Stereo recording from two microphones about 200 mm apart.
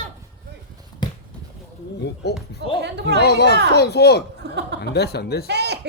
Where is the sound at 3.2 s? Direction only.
55° left (ahead or behind).